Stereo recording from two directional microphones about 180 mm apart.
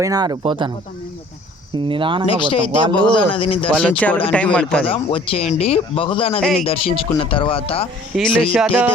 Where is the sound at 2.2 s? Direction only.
30° left (ahead or behind).